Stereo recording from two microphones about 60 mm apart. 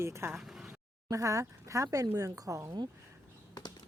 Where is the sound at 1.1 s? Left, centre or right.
Right.